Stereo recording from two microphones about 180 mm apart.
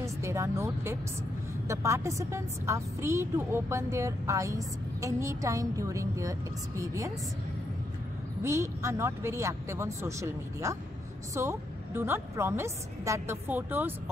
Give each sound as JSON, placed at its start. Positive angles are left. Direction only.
{"t": 0.0, "sound": "a woman's voice", "side_deg": -15}
{"t": 8.4, "sound": "a woman's voice", "side_deg": -15}